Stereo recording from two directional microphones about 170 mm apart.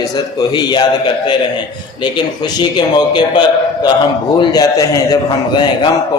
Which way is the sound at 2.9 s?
25° left (ahead or behind).